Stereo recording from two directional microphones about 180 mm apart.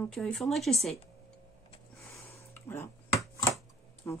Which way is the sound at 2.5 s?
15° left (ahead or behind).